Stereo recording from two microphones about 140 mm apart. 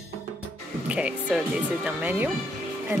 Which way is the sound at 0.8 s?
10° right (ahead or behind).